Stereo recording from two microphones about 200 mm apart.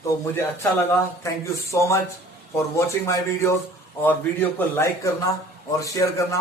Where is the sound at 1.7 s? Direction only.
15° left (ahead or behind).